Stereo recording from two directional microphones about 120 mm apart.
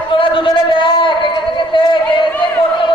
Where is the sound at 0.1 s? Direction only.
45° left (ahead or behind).